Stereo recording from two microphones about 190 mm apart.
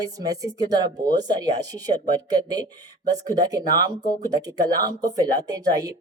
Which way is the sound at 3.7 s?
20° right (ahead or behind).